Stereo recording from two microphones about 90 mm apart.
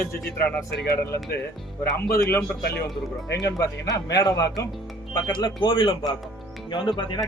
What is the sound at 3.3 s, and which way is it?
Speech, 40° left (ahead or behind).